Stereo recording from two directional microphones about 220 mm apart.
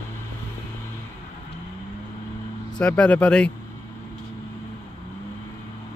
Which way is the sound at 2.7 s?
5° left (ahead or behind).